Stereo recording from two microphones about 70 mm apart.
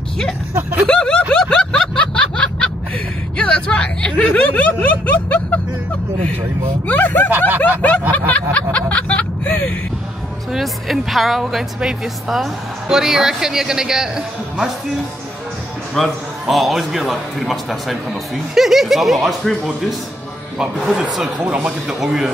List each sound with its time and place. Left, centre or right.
0.8 s snicker: centre
3.3 s a sound: centre
6.9 s snicker: left
7.2 s snicker: right
8.5 s a sound: centre
10.5 s speech: centre
15.9 s a man's voice: centre
20.5 s speech: centre
22.0 s a man's voice: centre